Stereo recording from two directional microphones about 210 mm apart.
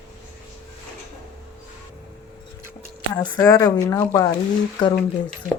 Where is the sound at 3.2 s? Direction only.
15° left (ahead or behind).